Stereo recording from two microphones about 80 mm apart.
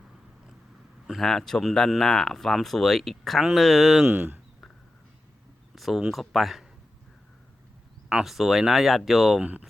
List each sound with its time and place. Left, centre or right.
1.0 s speech: centre
4.0 s speech: centre
5.7 s a sound: centre
6.0 s speech: centre
8.2 s speech: centre
9.4 s speech: centre